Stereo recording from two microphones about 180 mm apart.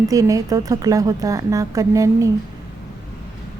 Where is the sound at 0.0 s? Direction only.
20° right (ahead or behind).